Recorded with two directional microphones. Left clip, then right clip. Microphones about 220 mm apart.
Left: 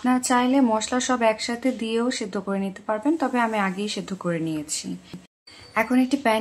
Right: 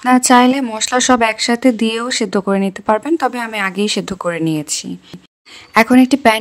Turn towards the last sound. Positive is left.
turn(degrees=-50)  # may be behind; listen again after turning